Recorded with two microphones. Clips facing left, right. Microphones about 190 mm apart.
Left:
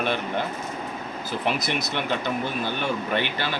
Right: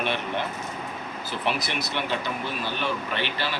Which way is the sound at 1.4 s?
45° left (ahead or behind).